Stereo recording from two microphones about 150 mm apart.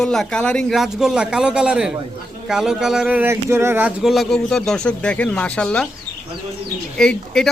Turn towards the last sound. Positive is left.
turn(degrees=5)  # may be behind; listen again after turning